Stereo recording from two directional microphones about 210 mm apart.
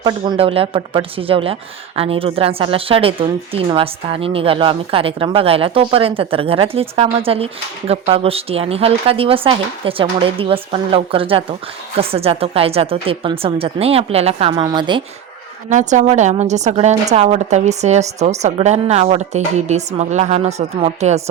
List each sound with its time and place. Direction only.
0.0 s a woman's voice: 25° right (ahead or behind)
15.7 s a woman's voice: 35° right (ahead or behind)